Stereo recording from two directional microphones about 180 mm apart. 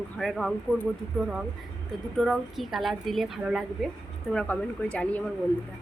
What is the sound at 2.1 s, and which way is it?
Speech, centre (ahead or behind).